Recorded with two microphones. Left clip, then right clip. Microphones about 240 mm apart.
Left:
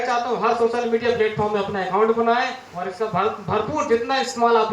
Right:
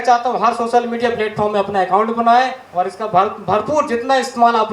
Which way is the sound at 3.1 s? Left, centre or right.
Right.